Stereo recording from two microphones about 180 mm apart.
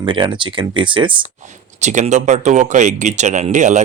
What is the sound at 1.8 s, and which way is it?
Speech, 40° right (ahead or behind).